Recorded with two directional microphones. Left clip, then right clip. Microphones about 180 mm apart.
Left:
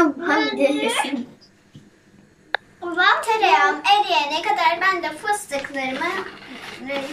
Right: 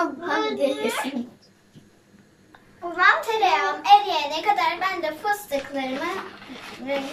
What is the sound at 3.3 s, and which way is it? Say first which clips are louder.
A child's voice: left 4 dB; 10° right (ahead or behind).